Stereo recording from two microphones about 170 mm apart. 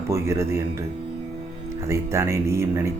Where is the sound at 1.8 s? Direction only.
15° right (ahead or behind).